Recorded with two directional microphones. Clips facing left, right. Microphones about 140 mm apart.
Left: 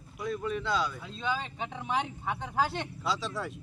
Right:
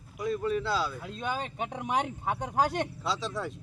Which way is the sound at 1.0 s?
50° right (ahead or behind).